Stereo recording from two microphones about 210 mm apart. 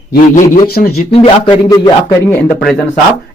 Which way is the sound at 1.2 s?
15° left (ahead or behind).